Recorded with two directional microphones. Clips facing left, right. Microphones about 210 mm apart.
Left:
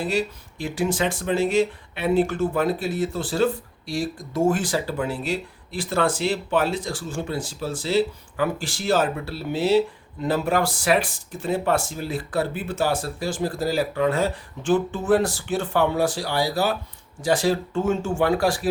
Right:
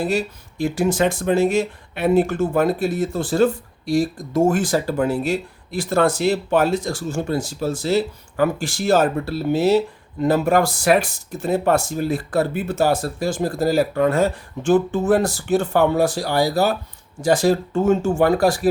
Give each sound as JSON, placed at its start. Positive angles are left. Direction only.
{"t": 0.6, "sound": "speech", "side_deg": -45}